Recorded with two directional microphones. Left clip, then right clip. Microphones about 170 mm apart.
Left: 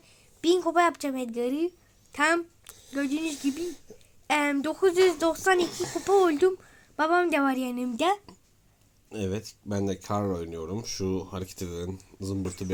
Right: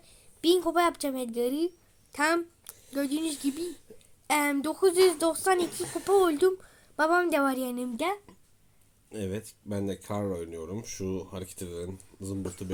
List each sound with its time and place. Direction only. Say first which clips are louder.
0.0 s a woman's voice: even; centre (ahead or behind)
3.6 s speech: left 2 dB; 30° left (ahead or behind)
4.3 s a woman's voice: left 1 dB; centre (ahead or behind)
5.6 s speech: left 2 dB; 25° left (ahead or behind)
6.1 s a woman's voice: left 1 dB; 5° right (ahead or behind)
8.0 s speech: left 7 dB; 15° left (ahead or behind)